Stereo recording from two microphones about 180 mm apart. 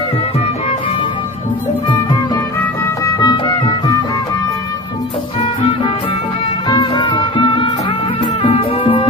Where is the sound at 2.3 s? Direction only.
15° left (ahead or behind).